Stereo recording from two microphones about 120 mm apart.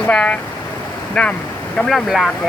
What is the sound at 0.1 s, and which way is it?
Speech, 10° left (ahead or behind).